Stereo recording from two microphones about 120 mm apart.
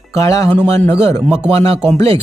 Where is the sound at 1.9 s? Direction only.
55° right (ahead or behind).